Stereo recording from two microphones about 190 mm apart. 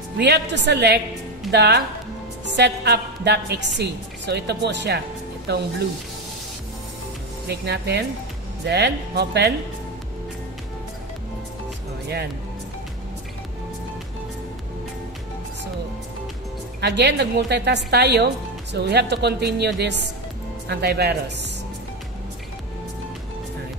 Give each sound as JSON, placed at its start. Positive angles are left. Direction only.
{"t": 0.2, "sound": "a woman's voice", "side_deg": -65}
{"t": 7.4, "sound": "a woman's voice", "side_deg": -60}
{"t": 16.8, "sound": "a woman's voice", "side_deg": -65}